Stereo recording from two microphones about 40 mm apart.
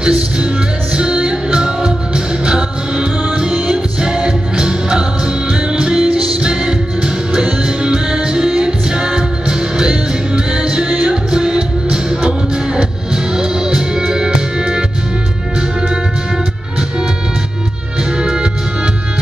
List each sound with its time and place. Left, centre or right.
0.9 s music: right
18.2 s music: right